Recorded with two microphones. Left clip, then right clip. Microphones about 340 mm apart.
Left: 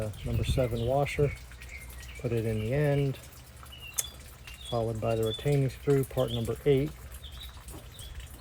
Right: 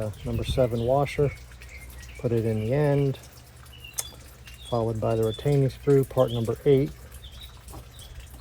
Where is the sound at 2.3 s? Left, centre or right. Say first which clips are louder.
Right 5 dB; right.